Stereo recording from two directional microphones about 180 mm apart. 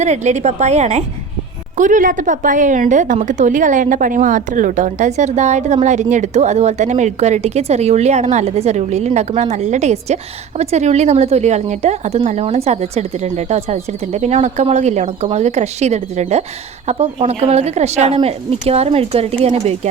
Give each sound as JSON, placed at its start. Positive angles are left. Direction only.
{"t": 0.0, "sound": "a woman's voice", "side_deg": -40}